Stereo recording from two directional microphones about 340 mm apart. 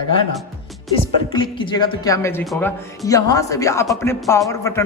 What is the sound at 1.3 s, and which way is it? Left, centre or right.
Speech, centre.